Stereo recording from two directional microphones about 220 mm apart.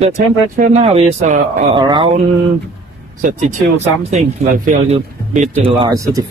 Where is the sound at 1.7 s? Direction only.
20° right (ahead or behind).